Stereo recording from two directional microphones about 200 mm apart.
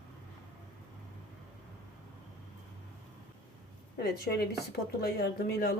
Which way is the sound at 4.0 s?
50° left (ahead or behind).